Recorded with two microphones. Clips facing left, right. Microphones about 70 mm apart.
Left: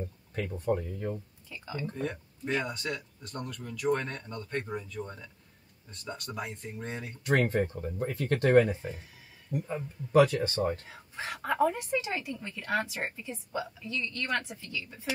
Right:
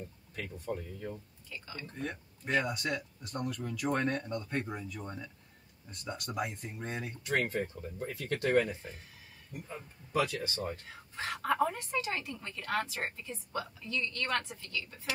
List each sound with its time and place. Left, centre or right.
0.7 s speech: left
2.0 s speech: centre
7.2 s speech: left
7.8 s speech: left
10.9 s a woman's voice: centre